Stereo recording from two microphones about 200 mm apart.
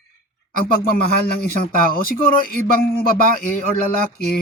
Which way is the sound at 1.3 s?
50° left (ahead or behind).